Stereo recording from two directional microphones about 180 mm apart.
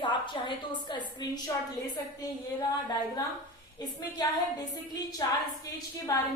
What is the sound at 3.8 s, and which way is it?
A woman's voice, 20° left (ahead or behind).